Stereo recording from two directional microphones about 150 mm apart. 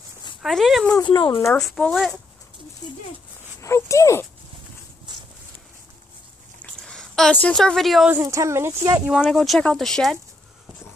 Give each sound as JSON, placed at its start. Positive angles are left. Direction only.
{"t": 0.4, "sound": "speech", "side_deg": 0}
{"t": 1.0, "sound": "speech", "side_deg": 30}
{"t": 1.6, "sound": "speech", "side_deg": 5}
{"t": 3.6, "sound": "speech", "side_deg": 20}
{"t": 5.1, "sound": "a sound", "side_deg": -30}
{"t": 6.6, "sound": "a sound", "side_deg": 5}
{"t": 8.1, "sound": "speech", "side_deg": -20}
{"t": 9.0, "sound": "speech", "side_deg": -5}